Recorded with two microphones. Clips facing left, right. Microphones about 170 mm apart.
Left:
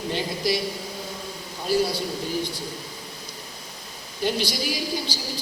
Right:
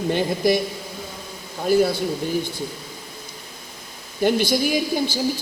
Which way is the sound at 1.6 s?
50° right (ahead or behind).